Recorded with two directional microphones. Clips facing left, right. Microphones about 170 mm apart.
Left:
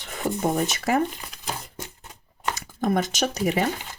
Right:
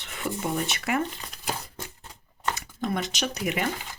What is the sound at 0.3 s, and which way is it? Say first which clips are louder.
Speech: left 5 dB; 40° left (ahead or behind).